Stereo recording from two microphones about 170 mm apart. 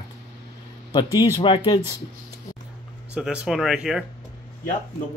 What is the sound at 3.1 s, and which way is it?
Speech, 5° right (ahead or behind).